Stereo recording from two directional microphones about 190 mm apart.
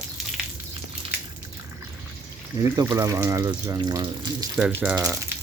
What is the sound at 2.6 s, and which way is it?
Speech, 15° right (ahead or behind).